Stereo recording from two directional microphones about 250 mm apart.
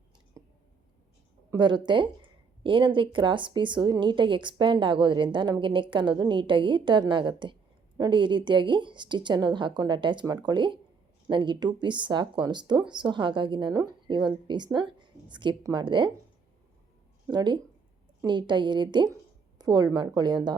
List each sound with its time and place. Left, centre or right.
0.4 s a sound: centre
1.5 s a woman's voice: centre
17.3 s a woman's voice: centre